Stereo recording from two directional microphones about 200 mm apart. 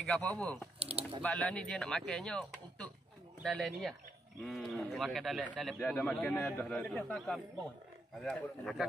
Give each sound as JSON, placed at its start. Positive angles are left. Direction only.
{"t": 0.0, "sound": "speech", "side_deg": 5}
{"t": 0.7, "sound": "speech", "side_deg": -30}
{"t": 1.2, "sound": "speech", "side_deg": 5}